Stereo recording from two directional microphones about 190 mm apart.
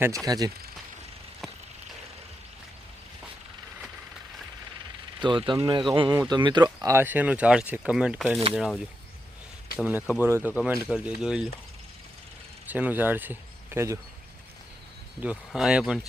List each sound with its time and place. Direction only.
0.3 s speech: 20° right (ahead or behind)
5.2 s speech: 25° right (ahead or behind); by 11.4 s 5° right (ahead or behind)
12.6 s speech: 10° right (ahead or behind)
15.2 s speech: 5° right (ahead or behind)